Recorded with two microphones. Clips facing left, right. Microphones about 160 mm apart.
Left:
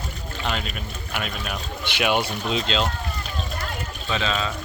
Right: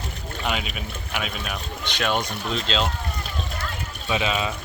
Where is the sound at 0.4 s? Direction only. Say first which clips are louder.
Right 1 dB; 5° right (ahead or behind).